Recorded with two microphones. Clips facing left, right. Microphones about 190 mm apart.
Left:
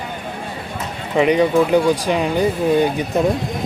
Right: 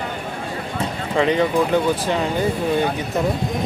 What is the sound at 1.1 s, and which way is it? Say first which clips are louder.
Speech: left 4 dB; 15° left (ahead or behind).